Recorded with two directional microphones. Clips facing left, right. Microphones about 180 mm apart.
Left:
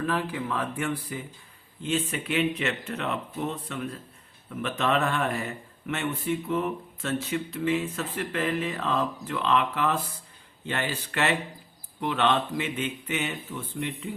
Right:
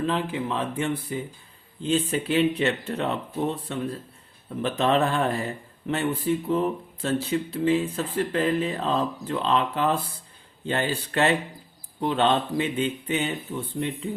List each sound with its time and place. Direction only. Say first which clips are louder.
0.0 s speech: right 3 dB; 20° right (ahead or behind)